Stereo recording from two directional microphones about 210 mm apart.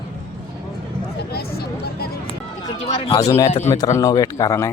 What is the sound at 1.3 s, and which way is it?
Speech, 50° left (ahead or behind).